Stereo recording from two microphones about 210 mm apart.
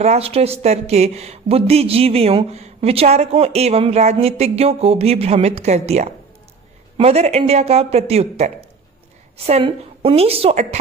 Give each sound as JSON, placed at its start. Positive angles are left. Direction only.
{"t": 0.0, "sound": "speech", "side_deg": -30}